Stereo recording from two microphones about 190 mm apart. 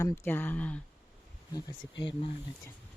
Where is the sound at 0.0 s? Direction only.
10° left (ahead or behind).